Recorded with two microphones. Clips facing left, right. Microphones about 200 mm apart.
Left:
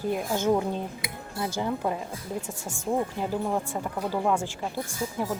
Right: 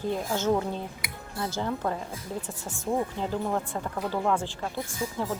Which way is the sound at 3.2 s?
10° left (ahead or behind).